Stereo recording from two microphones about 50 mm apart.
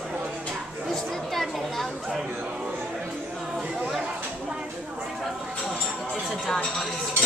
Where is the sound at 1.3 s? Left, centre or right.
Centre.